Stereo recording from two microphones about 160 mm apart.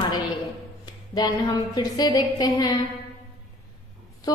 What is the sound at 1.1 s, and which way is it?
A woman's voice, 25° left (ahead or behind).